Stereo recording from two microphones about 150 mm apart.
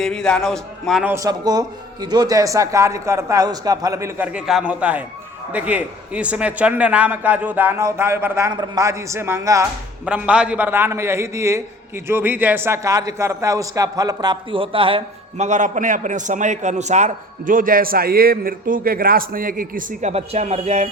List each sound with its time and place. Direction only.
0.0 s a man's voice: 5° left (ahead or behind)
1.0 s a man's voice: 20° right (ahead or behind)
4.3 s a man's voice: 5° right (ahead or behind); by 9.6 s 20° right (ahead or behind)
10.1 s a man's voice: 5° right (ahead or behind); by 15.0 s 35° right (ahead or behind)
15.4 s a man's voice: 55° right (ahead or behind)